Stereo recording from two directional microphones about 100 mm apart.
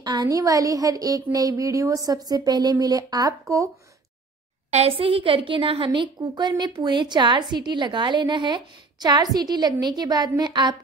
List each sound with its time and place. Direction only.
0.0 s a woman's voice: 40° right (ahead or behind)
4.6 s a woman's voice: 85° right; by 5.9 s 60° right (ahead or behind)
5.9 s a woman's voice: 45° right (ahead or behind)